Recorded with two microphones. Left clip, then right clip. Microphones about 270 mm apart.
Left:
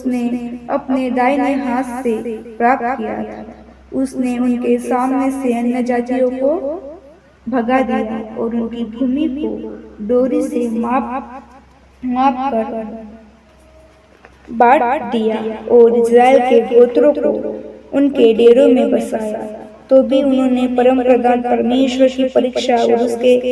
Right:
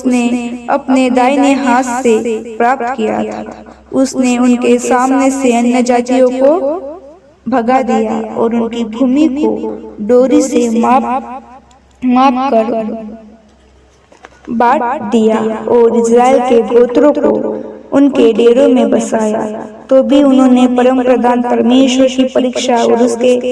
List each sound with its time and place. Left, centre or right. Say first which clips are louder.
0.0 s speech: right 7 dB; right
14.7 s a man's voice: right 1 dB; right